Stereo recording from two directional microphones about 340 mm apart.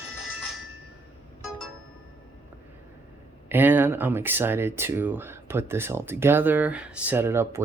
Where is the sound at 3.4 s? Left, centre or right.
Centre.